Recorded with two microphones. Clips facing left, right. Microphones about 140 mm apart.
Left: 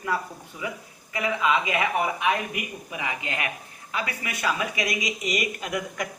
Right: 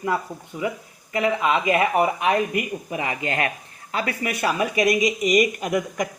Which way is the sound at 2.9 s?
40° right (ahead or behind).